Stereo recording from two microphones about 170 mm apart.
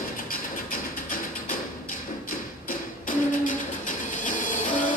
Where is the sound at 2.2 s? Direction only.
55° left (ahead or behind).